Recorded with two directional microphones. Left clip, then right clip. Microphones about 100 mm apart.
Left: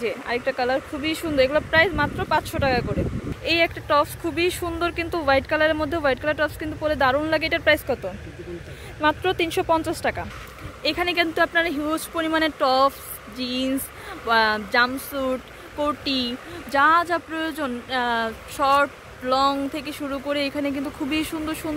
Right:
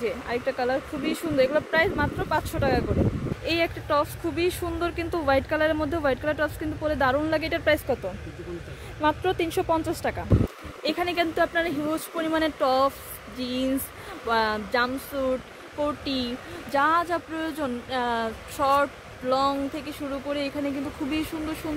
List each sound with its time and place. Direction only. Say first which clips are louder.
0.0 s speech: left 3 dB; 10° right (ahead or behind)
9.0 s speech: left 3 dB; 10° right (ahead or behind)
20.1 s speech: left 4 dB; 5° left (ahead or behind)